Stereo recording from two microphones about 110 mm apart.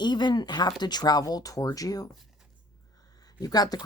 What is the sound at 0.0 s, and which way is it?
A woman's voice, 40° left (ahead or behind).